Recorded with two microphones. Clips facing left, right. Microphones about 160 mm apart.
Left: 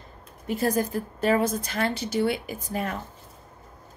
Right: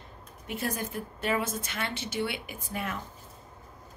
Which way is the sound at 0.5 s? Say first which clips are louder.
Left 9 dB; 40° left (ahead or behind).